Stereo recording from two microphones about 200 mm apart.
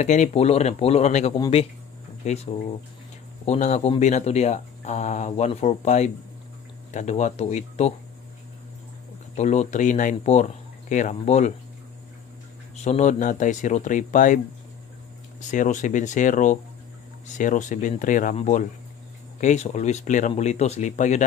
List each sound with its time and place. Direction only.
0.0 s speech: 35° left (ahead or behind)
9.3 s speech: 35° left (ahead or behind)
12.7 s speech: 35° left (ahead or behind)
15.5 s speech: 40° left (ahead or behind)